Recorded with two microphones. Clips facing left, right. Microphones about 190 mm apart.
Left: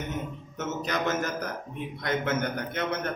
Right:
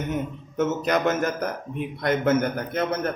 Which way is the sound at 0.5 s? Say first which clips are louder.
Right 8 dB; 55° right (ahead or behind).